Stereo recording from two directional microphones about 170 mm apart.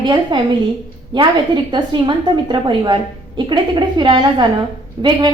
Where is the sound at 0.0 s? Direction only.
25° right (ahead or behind).